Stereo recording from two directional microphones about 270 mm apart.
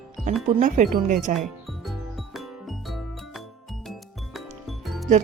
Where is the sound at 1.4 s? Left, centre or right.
Centre.